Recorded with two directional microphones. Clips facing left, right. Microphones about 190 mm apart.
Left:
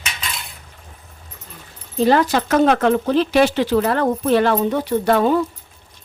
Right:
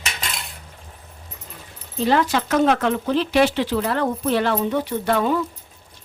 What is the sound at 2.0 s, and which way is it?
Speech, 40° left (ahead or behind).